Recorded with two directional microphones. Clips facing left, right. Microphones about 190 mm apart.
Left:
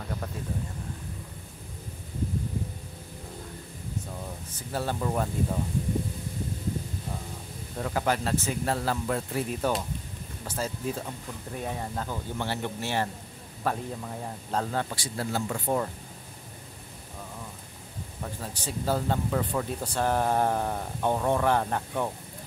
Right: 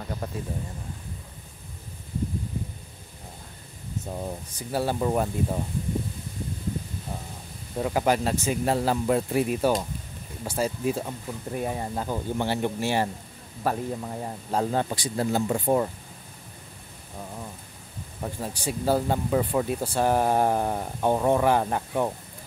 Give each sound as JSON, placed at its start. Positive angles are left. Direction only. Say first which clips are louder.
{"t": 4.6, "sound": "speech", "louder": "right 4 dB", "side_deg": -10}
{"t": 7.7, "sound": "speech", "louder": "right 4 dB", "side_deg": -15}
{"t": 18.2, "sound": "speech", "louder": "right 5 dB", "side_deg": -15}